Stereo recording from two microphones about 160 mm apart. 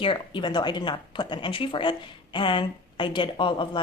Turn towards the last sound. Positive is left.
turn(degrees=30)  # may be behind; listen again after turning